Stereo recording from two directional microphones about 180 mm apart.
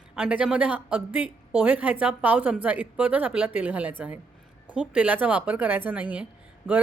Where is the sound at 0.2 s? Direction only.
5° right (ahead or behind).